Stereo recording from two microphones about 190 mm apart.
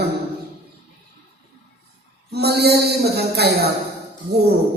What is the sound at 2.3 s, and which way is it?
Speech, 60° right (ahead or behind).